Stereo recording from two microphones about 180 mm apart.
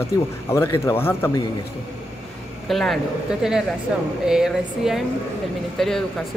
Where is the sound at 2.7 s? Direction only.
Centre (ahead or behind).